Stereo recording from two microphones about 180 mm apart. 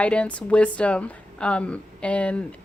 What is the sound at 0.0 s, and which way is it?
Speech, 5° left (ahead or behind).